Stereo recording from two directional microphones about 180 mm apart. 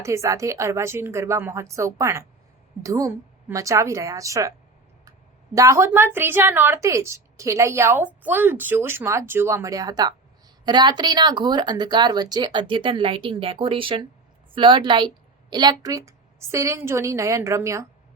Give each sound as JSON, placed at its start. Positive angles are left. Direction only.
{"t": 0.0, "sound": "a woman's voice", "side_deg": -15}
{"t": 5.5, "sound": "a woman's voice", "side_deg": -15}